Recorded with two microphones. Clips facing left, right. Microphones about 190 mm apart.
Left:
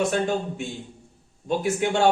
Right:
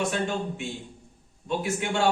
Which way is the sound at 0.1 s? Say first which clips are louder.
Left 4 dB; 40° left (ahead or behind).